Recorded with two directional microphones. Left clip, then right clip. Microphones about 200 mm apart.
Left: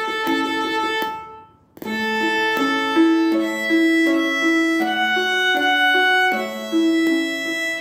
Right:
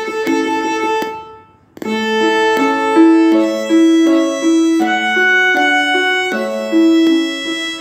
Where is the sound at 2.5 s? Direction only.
25° right (ahead or behind).